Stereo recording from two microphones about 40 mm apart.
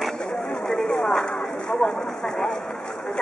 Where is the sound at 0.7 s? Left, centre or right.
Centre.